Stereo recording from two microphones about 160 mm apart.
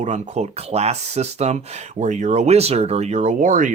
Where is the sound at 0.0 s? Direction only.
45° right (ahead or behind).